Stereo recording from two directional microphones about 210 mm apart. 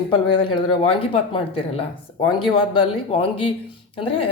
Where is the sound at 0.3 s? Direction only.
25° left (ahead or behind).